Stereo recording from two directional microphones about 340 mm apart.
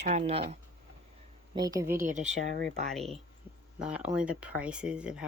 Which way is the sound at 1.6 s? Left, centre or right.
Centre.